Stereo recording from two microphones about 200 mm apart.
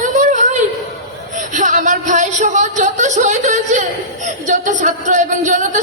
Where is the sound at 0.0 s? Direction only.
40° right (ahead or behind).